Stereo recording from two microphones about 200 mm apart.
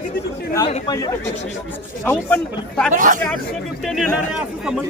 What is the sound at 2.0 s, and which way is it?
Speech, 5° left (ahead or behind).